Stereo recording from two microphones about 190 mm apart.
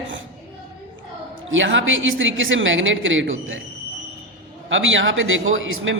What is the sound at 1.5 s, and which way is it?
A woman's voice, 80° right.